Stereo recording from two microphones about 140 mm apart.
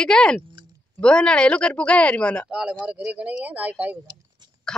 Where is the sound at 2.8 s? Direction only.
5° right (ahead or behind).